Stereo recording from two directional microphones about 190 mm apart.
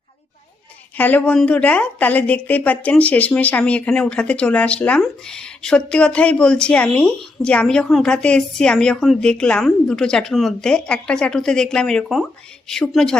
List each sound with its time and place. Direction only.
0.9 s a woman's voice: 10° left (ahead or behind)